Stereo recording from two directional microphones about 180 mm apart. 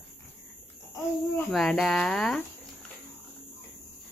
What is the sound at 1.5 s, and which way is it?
Speech, centre (ahead or behind).